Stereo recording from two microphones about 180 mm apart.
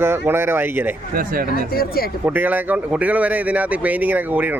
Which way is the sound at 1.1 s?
55° right (ahead or behind).